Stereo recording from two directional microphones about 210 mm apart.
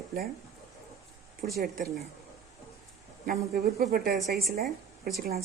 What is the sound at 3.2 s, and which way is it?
Speech, 45° right (ahead or behind).